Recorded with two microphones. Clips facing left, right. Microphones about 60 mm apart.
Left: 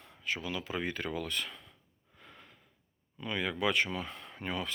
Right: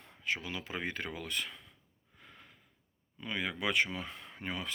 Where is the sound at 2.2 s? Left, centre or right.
Centre.